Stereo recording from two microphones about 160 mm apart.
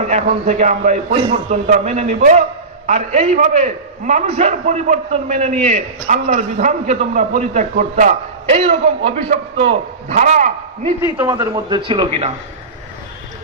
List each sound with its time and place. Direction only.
0.1 s a man's voice: 45° right (ahead or behind)
11.2 s a man's voice: 25° right (ahead or behind)